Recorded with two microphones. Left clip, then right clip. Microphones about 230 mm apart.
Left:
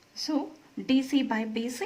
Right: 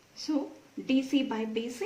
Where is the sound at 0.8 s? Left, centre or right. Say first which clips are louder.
Left 2 dB; left.